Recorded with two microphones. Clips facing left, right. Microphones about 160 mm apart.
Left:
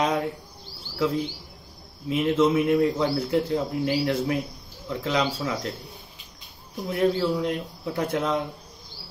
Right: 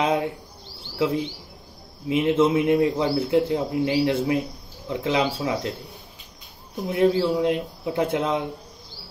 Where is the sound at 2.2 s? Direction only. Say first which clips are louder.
Right 1 dB; 30° right (ahead or behind).